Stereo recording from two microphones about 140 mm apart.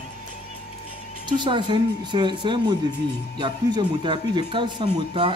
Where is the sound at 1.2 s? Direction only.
30° right (ahead or behind).